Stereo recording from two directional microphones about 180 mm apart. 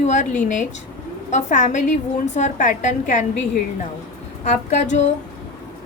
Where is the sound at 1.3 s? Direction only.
40° left (ahead or behind).